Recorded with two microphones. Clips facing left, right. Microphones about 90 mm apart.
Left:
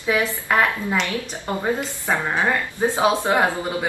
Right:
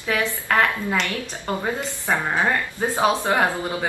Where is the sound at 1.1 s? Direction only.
15° left (ahead or behind).